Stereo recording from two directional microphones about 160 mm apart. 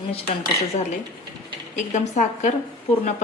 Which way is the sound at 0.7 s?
45° left (ahead or behind).